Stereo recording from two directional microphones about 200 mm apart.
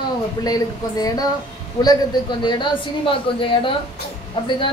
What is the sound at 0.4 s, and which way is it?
Speech, 20° left (ahead or behind).